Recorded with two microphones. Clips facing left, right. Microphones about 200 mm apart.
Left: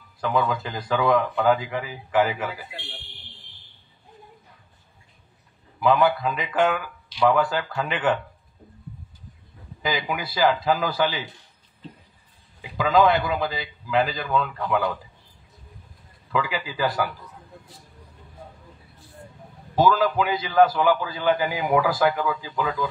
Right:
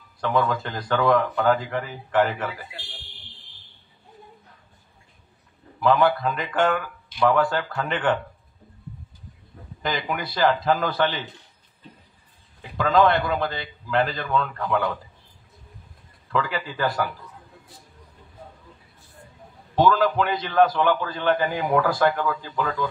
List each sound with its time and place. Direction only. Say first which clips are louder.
0.2 s a man's voice: right 1 dB; centre (ahead or behind)
2.7 s a man's voice: left 3 dB; 60° left (ahead or behind)
5.8 s a man's voice: even; 5° left (ahead or behind)
9.8 s a man's voice: even; 5° left (ahead or behind)
12.7 s a man's voice: even; 5° left (ahead or behind)
16.3 s a man's voice: even; 5° left (ahead or behind)
19.7 s a man's voice: even; 5° left (ahead or behind)